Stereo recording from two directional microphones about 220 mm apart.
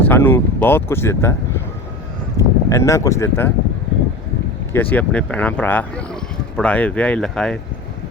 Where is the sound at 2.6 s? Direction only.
15° left (ahead or behind).